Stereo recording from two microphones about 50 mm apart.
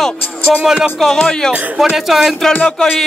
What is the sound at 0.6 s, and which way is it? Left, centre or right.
Speech, centre.